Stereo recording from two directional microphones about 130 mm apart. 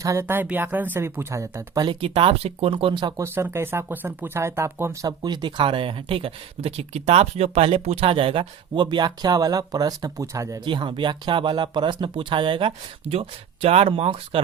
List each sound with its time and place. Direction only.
0.0 s speech: 25° right (ahead or behind)
1.9 s speech: 45° right (ahead or behind)
3.2 s speech: 20° right (ahead or behind)
5.0 s speech: 35° right (ahead or behind)
10.6 s speech: 35° right (ahead or behind)